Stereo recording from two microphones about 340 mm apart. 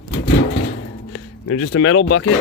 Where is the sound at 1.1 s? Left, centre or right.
Left.